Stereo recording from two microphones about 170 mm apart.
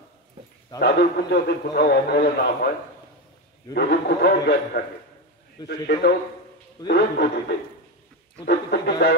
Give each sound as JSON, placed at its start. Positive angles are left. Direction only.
{"t": 0.7, "sound": "a man's voice", "side_deg": 70}
{"t": 3.7, "sound": "a man's voice", "side_deg": 75}
{"t": 6.9, "sound": "a man's voice", "side_deg": 80}